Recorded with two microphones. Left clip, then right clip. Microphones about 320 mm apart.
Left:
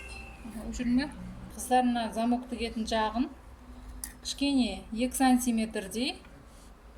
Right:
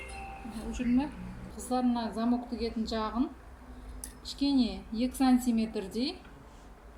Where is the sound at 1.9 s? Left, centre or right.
Left.